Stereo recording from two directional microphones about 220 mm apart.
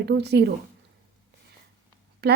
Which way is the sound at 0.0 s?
50° right (ahead or behind).